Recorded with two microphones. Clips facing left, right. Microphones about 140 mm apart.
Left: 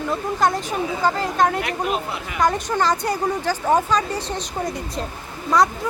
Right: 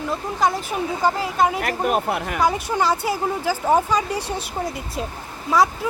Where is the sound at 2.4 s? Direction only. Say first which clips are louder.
Left 2 dB; 5° right (ahead or behind).